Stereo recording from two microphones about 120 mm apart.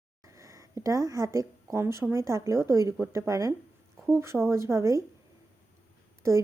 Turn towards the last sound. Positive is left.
turn(degrees=-25)  # may be behind; listen again after turning